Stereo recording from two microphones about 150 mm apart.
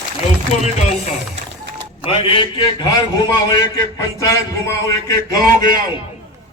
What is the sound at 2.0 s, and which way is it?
A man's voice, 35° left (ahead or behind).